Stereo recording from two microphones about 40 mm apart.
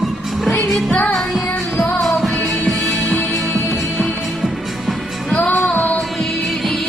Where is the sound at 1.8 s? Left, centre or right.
Left.